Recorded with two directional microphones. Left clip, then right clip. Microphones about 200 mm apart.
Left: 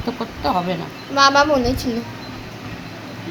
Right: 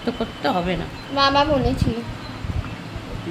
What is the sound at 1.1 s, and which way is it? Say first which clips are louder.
Speech: left 4 dB; 30° left (ahead or behind).